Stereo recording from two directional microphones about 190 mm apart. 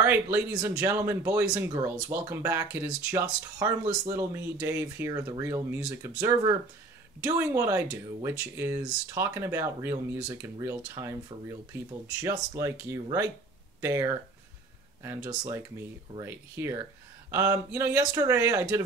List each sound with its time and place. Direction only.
0.0 s speech: 10° right (ahead or behind)